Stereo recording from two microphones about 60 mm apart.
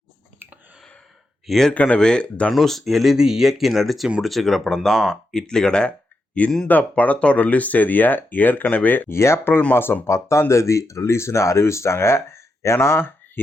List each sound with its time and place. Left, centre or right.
1.5 s speech: centre
1.7 s speech: left
2.5 s speech: centre
6.7 s speech: left
9.1 s speech: left
10.1 s speech: left